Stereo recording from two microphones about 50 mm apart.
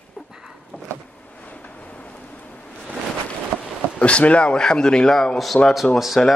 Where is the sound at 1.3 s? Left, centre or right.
Left.